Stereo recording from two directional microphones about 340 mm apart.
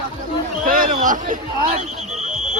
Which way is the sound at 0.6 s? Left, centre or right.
Right.